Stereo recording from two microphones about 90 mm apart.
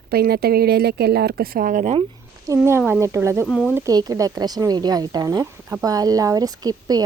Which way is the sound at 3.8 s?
45° right (ahead or behind).